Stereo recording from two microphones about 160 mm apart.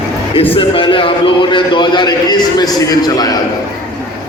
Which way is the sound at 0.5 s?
30° left (ahead or behind).